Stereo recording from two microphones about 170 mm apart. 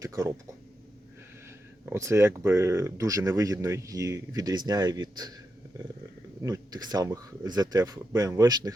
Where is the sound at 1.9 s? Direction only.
15° right (ahead or behind).